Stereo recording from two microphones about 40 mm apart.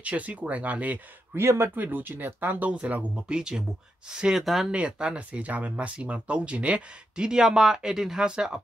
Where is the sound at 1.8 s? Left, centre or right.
Right.